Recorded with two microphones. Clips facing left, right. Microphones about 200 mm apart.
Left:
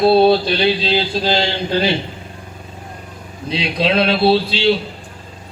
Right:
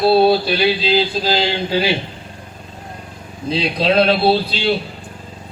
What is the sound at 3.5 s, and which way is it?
Speech, 35° right (ahead or behind).